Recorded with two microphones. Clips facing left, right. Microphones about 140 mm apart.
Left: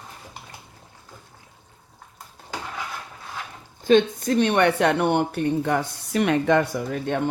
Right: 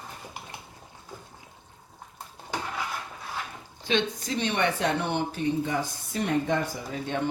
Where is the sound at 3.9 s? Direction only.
50° left (ahead or behind).